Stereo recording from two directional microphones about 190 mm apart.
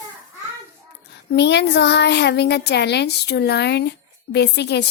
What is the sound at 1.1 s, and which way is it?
Speech, 65° left (ahead or behind).